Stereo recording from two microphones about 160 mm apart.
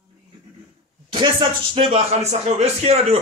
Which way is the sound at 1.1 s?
30° right (ahead or behind).